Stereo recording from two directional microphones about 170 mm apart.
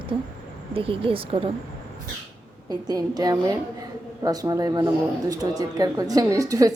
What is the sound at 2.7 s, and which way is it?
A woman's voice, 25° right (ahead or behind).